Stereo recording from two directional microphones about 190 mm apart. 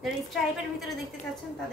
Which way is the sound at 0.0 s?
Centre (ahead or behind).